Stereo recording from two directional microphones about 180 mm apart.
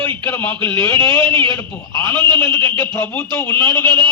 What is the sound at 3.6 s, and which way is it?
Speech, 25° right (ahead or behind).